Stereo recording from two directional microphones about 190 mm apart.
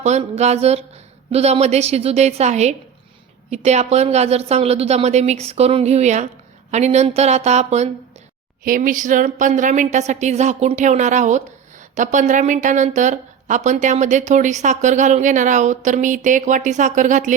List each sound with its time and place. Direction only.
0.0 s a woman's voice: 35° right (ahead or behind)
8.6 s a woman's voice: 45° right (ahead or behind)